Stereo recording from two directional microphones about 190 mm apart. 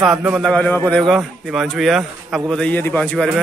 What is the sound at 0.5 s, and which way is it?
A man's voice, 5° left (ahead or behind).